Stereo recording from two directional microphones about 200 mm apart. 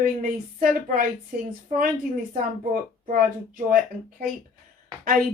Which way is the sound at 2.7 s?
45° right (ahead or behind).